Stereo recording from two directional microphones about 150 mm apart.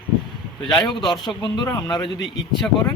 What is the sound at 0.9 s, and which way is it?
A man's voice, 30° left (ahead or behind).